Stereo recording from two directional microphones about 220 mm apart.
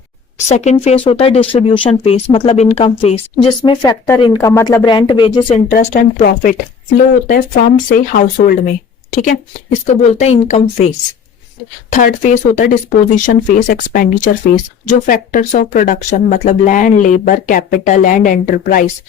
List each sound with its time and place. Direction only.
0.3 s speech: 30° left (ahead or behind)
5.7 s speech: 40° left (ahead or behind)